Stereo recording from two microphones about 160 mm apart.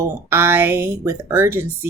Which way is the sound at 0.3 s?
15° right (ahead or behind).